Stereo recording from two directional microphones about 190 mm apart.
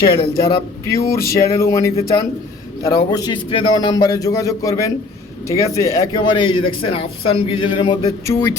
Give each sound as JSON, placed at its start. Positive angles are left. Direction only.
{"t": 0.3, "sound": "a man's voice", "side_deg": 20}